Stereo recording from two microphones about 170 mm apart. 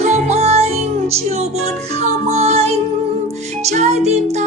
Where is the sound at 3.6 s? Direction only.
40° right (ahead or behind).